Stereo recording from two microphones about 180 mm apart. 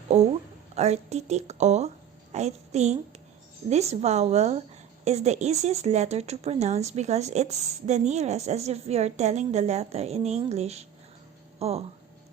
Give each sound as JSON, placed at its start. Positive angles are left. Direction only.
{"t": 0.1, "sound": "a woman's voice", "side_deg": -40}